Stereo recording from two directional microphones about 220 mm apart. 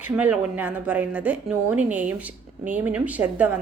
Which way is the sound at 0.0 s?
5° right (ahead or behind).